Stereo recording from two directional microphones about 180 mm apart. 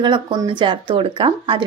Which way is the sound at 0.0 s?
25° right (ahead or behind).